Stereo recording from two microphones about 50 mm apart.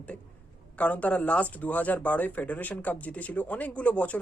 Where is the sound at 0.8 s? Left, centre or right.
Left.